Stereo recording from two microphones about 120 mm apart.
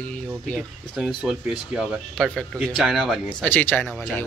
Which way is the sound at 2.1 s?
5° left (ahead or behind).